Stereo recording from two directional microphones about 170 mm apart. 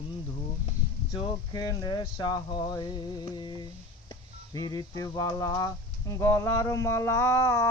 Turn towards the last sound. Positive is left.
turn(degrees=15)  # may be behind; listen again after turning